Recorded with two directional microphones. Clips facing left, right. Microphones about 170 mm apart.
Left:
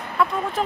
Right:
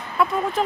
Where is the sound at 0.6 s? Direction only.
Centre (ahead or behind).